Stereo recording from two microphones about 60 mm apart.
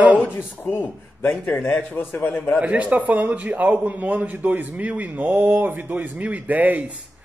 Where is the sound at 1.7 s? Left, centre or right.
Left.